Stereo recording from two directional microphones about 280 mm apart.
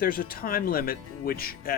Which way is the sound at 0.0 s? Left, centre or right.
Left.